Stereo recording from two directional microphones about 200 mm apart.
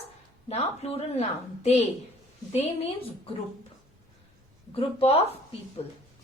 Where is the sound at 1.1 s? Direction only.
35° left (ahead or behind).